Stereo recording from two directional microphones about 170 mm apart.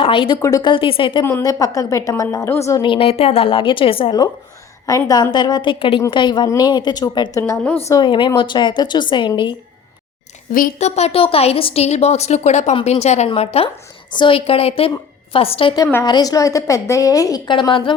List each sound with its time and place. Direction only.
0.0 s a woman's voice: 30° left (ahead or behind)
1.2 s a woman's voice: 20° left (ahead or behind)
2.8 s a woman's voice: 30° left (ahead or behind); by 7.8 s 15° left (ahead or behind)
7.9 s a woman's voice: 25° left (ahead or behind)
10.5 s a woman's voice: 50° left (ahead or behind); by 17.9 s 30° left (ahead or behind)